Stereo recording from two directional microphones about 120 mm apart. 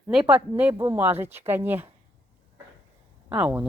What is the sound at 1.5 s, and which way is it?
Speech, 20° right (ahead or behind).